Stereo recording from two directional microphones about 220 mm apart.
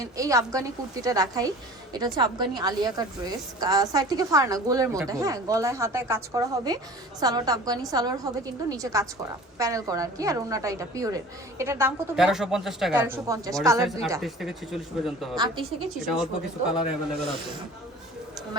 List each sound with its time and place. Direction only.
0.0 s a woman's voice: 15° right (ahead or behind)
14.2 s speech: centre (ahead or behind)